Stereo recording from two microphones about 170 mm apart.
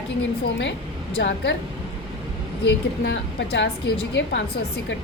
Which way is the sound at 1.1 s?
90° left.